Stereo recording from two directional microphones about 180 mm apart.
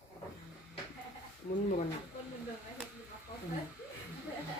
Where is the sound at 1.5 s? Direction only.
50° left (ahead or behind).